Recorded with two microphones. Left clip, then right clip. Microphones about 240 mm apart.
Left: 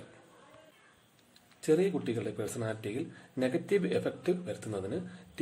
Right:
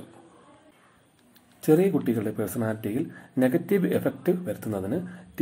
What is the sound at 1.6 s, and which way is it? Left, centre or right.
Speech, centre.